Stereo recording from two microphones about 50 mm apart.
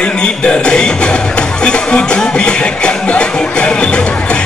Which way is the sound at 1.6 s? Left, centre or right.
Left.